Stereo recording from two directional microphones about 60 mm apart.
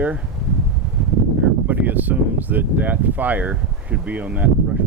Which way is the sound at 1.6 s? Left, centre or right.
Right.